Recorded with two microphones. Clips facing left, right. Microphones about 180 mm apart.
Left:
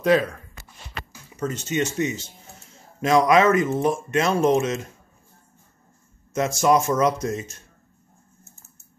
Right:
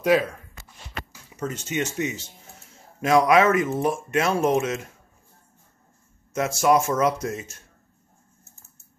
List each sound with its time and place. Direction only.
0.0 s speech: 10° right (ahead or behind)
1.4 s speech: 10° right (ahead or behind)
6.3 s speech: 5° right (ahead or behind)